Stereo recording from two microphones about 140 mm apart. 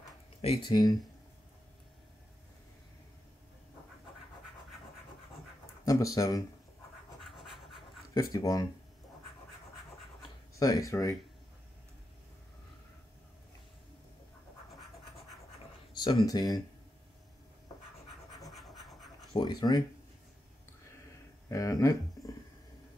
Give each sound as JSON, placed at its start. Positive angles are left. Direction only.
{"t": 0.4, "sound": "speech", "side_deg": 40}
{"t": 5.9, "sound": "speech", "side_deg": 25}
{"t": 8.1, "sound": "speech", "side_deg": 25}
{"t": 10.6, "sound": "speech", "side_deg": 25}
{"t": 15.9, "sound": "speech", "side_deg": 30}
{"t": 19.3, "sound": "speech", "side_deg": 30}
{"t": 21.5, "sound": "speech", "side_deg": 25}